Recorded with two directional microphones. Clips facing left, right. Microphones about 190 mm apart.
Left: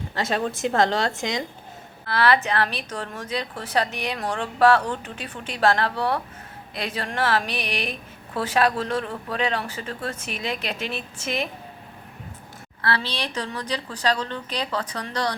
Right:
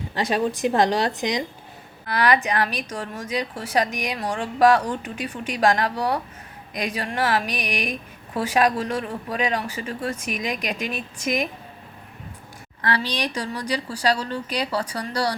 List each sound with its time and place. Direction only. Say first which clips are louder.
0.1 s a woman's voice: right 3 dB; 15° right (ahead or behind)
12.8 s a woman's voice: right 2 dB; 15° right (ahead or behind)